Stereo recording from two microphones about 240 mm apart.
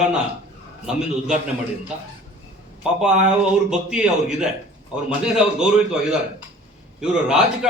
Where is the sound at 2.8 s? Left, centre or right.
Centre.